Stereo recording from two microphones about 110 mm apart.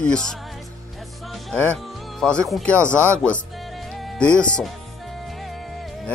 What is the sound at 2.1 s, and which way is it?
Speech, 10° left (ahead or behind).